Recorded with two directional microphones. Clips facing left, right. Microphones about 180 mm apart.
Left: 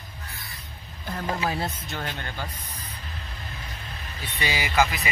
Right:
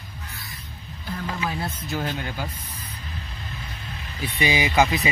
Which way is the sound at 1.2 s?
35° left (ahead or behind).